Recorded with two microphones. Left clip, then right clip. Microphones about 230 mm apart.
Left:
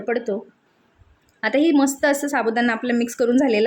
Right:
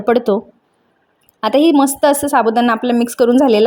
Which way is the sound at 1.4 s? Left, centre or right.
Centre.